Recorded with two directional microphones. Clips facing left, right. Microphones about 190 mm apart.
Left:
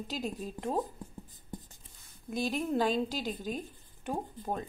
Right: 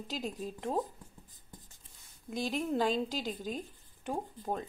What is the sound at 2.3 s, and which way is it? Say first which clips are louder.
Speech: left 2 dB; 20° right (ahead or behind).